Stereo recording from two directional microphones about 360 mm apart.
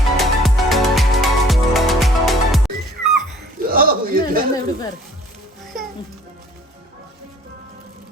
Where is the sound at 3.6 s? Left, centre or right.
Right.